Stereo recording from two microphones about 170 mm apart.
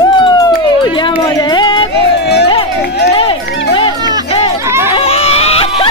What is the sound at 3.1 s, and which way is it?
Run, 35° left (ahead or behind).